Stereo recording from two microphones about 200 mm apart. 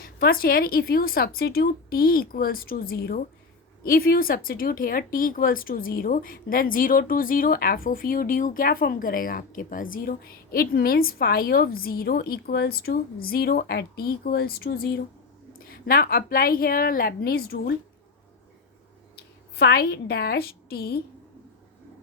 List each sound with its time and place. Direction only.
0.0 s speech: 45° left (ahead or behind)
19.5 s speech: 55° left (ahead or behind)